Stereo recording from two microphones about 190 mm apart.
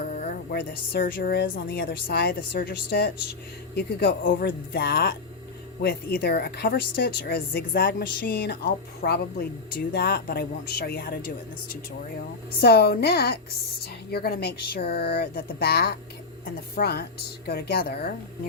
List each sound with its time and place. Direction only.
0.1 s music: 50° left (ahead or behind)
1.7 s a woman's voice: 50° left (ahead or behind)
12.5 s a woman's voice: 55° left (ahead or behind)